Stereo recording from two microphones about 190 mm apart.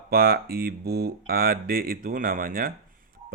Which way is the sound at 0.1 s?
50° right (ahead or behind).